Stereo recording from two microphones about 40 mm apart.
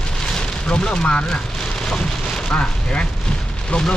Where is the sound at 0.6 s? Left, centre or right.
Left.